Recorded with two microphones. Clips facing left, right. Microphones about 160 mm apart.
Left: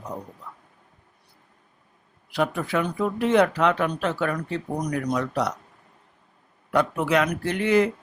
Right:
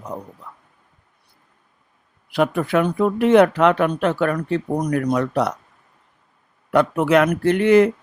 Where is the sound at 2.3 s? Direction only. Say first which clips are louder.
Right 6 dB; 60° right (ahead or behind).